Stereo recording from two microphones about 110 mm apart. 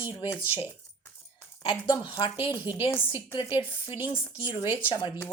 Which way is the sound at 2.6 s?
20° right (ahead or behind).